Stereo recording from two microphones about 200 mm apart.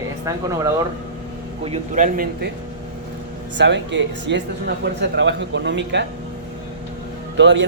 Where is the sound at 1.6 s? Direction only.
35° right (ahead or behind).